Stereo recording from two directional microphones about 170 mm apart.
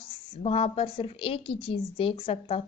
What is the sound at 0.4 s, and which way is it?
Speech, 35° left (ahead or behind).